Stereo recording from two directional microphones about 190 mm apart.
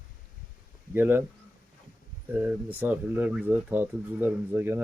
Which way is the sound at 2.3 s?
10° right (ahead or behind).